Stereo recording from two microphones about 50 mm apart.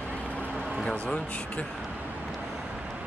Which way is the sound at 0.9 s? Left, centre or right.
Left.